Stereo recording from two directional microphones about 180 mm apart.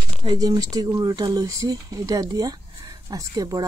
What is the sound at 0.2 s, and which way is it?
Speech, 25° right (ahead or behind).